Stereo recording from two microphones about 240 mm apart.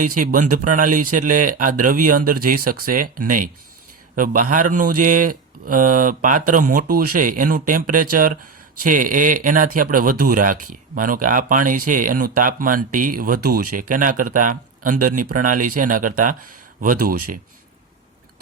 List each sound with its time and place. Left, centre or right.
0.0 s speech: right